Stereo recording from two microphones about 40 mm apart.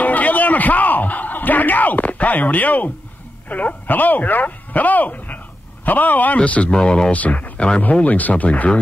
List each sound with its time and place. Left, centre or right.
0.0 s a sound: left
3.4 s speech: left
6.7 s speech: left
7.1 s speech: left